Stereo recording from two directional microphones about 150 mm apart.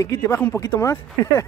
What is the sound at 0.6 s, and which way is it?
Speech, 20° left (ahead or behind).